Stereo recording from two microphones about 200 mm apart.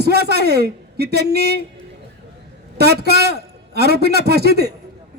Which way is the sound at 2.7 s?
55° right (ahead or behind).